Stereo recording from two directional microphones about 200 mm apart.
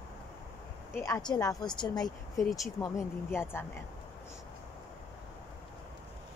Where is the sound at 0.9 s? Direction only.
15° left (ahead or behind).